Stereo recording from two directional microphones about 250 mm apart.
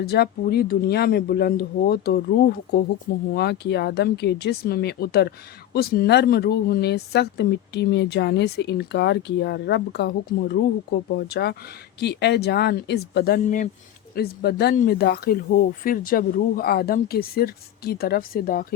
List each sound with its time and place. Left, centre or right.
0.0 s speech: left
11.1 s speech: left